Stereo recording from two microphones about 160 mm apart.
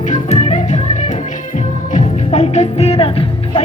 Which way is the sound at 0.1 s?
45° left (ahead or behind).